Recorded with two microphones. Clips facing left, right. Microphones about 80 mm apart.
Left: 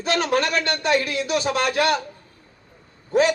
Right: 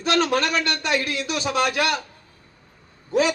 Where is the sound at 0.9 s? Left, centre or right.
Left.